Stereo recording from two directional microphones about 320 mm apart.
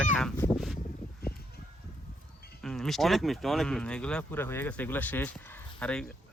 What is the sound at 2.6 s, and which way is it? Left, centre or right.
Speech, centre.